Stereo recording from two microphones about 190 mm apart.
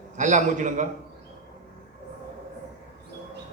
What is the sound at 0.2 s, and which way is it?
Speech, 40° right (ahead or behind).